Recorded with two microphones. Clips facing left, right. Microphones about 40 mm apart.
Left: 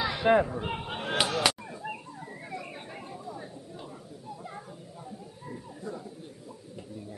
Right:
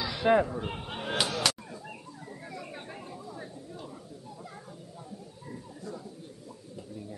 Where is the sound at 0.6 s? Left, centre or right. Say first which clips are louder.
Left 2 dB; left.